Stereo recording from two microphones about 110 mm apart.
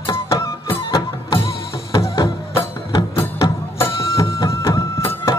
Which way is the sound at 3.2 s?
25° left (ahead or behind).